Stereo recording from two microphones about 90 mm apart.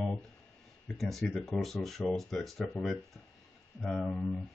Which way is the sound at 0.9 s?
Centre (ahead or behind).